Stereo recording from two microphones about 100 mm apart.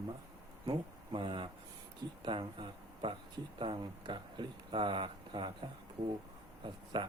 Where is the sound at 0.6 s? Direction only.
60° right (ahead or behind).